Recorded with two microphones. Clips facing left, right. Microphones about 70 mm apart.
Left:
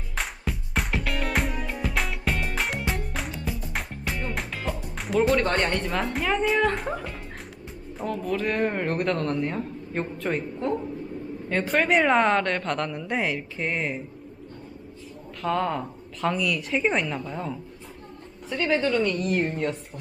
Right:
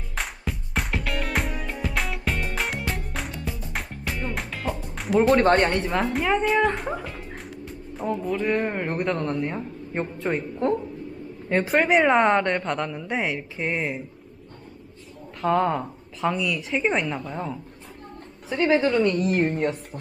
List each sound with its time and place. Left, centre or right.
0.2 s music: centre
5.3 s speech: right
6.0 s a woman's voice: centre
10.2 s a woman's voice: centre
11.4 s a woman's voice: centre
15.4 s a woman's voice: centre
18.6 s a woman's voice: centre